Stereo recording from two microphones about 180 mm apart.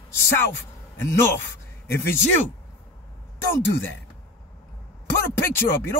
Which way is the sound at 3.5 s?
10° left (ahead or behind).